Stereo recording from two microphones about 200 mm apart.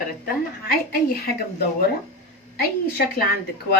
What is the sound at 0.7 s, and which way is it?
A woman's voice, 50° left (ahead or behind).